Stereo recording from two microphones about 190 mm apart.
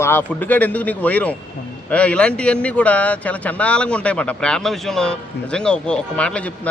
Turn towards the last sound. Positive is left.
turn(degrees=5)  # may be behind; listen again after turning